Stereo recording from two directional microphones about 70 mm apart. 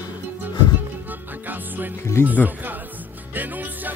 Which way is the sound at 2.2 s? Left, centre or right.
Right.